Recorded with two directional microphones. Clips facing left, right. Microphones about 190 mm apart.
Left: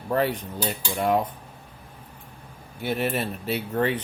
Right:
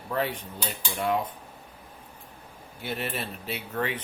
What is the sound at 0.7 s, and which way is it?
Cutlery, 45° left (ahead or behind).